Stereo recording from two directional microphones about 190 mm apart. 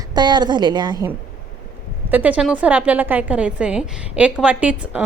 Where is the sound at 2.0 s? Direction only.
10° right (ahead or behind).